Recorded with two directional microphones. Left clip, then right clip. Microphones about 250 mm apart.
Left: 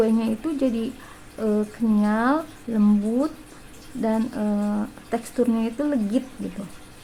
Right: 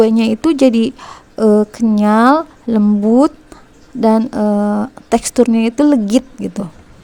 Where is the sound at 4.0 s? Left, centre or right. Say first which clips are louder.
Right 12 dB; right.